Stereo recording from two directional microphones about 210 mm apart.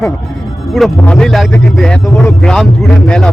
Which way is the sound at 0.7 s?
Centre (ahead or behind).